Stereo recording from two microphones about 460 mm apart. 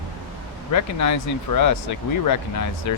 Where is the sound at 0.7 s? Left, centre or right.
Left.